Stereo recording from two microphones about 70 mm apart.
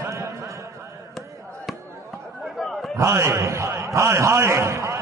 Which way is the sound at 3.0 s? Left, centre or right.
Right.